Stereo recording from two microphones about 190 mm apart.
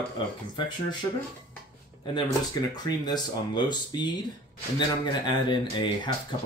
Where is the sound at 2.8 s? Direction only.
20° left (ahead or behind).